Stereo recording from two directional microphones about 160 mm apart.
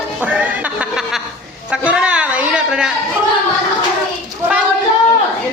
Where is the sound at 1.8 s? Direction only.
5° right (ahead or behind).